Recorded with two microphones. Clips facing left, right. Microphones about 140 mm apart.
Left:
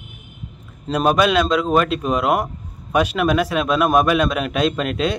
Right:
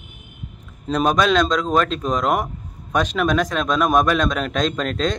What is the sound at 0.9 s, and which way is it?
A man's voice, 5° left (ahead or behind).